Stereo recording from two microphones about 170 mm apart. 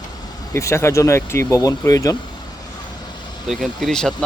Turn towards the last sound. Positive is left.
turn(degrees=5)  # may be behind; listen again after turning